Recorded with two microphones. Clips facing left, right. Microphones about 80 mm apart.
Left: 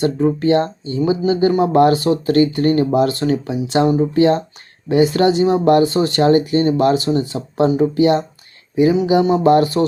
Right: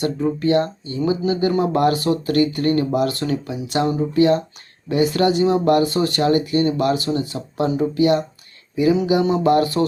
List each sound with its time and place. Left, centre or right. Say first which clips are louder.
0.0 s speech: left 4 dB; left